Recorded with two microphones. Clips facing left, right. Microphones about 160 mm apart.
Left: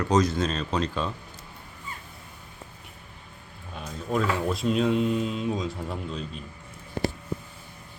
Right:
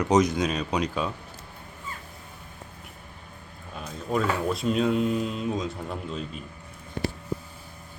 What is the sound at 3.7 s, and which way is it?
Speech, centre (ahead or behind).